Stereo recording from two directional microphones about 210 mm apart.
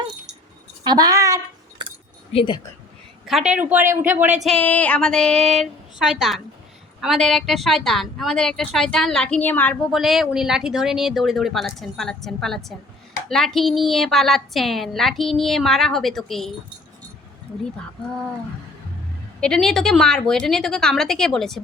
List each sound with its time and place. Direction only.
0.9 s a woman's voice: 20° right (ahead or behind)
2.3 s speech: 20° left (ahead or behind)
3.2 s a woman's voice: 5° right (ahead or behind)
19.4 s a woman's voice: 5° left (ahead or behind)